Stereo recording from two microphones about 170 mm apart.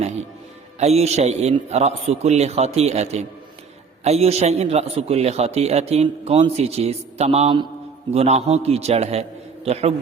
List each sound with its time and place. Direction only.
0.8 s a man's voice: 40° right (ahead or behind)